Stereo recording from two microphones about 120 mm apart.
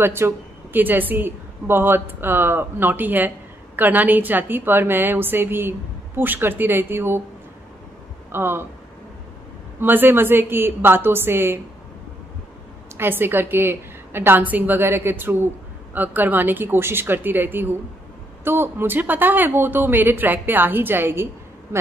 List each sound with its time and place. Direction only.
0.0 s a woman's voice: 20° right (ahead or behind)
8.3 s a woman's voice: 20° right (ahead or behind)
9.8 s a woman's voice: 15° right (ahead or behind)
12.9 s a woman's voice: 20° right (ahead or behind)